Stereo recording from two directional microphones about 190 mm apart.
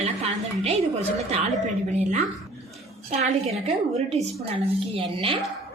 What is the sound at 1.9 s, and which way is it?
Speech, 35° right (ahead or behind).